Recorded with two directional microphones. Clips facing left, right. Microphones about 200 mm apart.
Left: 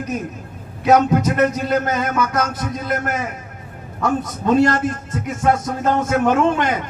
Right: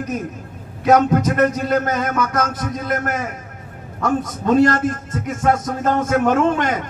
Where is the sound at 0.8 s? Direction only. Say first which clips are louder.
Even; 50° right (ahead or behind).